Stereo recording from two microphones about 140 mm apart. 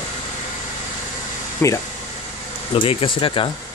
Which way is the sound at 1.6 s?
15° left (ahead or behind).